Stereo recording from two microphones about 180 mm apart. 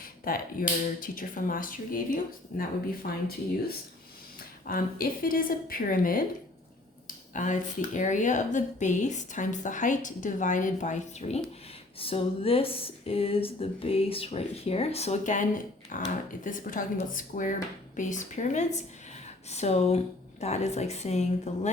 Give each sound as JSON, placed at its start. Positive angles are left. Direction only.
{"t": 0.0, "sound": "finger snapping", "side_deg": 50}
{"t": 0.9, "sound": "speech", "side_deg": 50}
{"t": 4.6, "sound": "speech", "side_deg": 55}
{"t": 7.3, "sound": "speech", "side_deg": 45}